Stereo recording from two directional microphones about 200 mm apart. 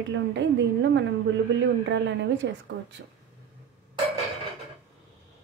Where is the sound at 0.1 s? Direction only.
65° right (ahead or behind).